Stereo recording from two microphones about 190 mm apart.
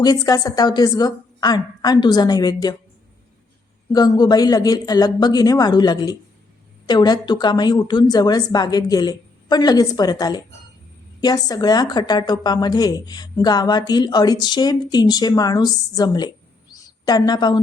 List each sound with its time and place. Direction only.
0.0 s a woman's voice: 20° left (ahead or behind)
3.9 s a woman's voice: 20° left (ahead or behind)